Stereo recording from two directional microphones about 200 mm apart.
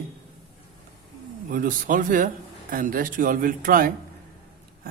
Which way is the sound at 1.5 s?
45° right (ahead or behind).